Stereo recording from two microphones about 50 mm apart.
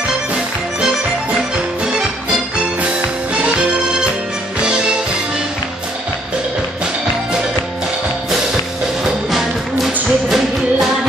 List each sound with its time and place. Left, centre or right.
0.3 s music: centre
3.4 s music: centre
9.0 s music: centre